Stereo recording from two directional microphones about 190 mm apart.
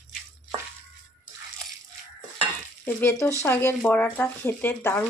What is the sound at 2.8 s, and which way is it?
Speech, 15° left (ahead or behind).